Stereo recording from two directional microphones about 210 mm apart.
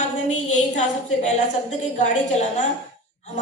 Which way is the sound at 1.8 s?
35° left (ahead or behind).